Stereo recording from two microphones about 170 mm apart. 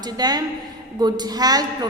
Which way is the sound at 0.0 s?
25° right (ahead or behind).